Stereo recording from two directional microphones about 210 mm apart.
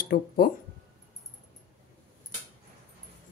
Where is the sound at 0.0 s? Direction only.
45° left (ahead or behind).